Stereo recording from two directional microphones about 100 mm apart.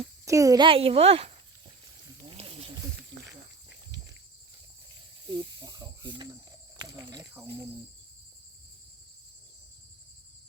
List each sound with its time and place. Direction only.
0.3 s speech: 35° right (ahead or behind)
0.6 s a woman's voice: 70° right (ahead or behind)
5.2 s snake: 45° right (ahead or behind)
6.7 s cricket: 45° right (ahead or behind)